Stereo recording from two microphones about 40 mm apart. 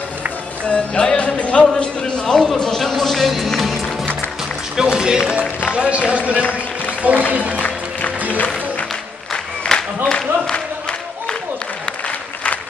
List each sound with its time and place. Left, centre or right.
0.7 s music: left
1.8 s a sound: left
2.4 s a man's voice: centre
2.8 s music: centre
4.7 s speech: centre
7.0 s music: right
9.6 s a sound: left